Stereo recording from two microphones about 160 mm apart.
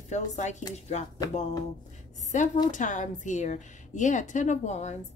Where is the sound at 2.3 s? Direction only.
50° left (ahead or behind).